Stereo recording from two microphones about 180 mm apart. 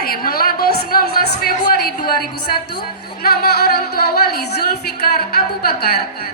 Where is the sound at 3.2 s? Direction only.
60° left (ahead or behind).